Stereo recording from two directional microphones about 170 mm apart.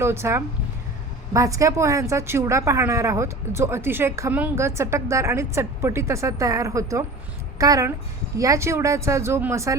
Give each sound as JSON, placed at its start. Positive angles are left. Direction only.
{"t": 0.0, "sound": "a woman's voice", "side_deg": -15}